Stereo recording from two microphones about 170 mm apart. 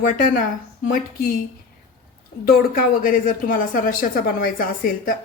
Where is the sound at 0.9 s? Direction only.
55° left (ahead or behind).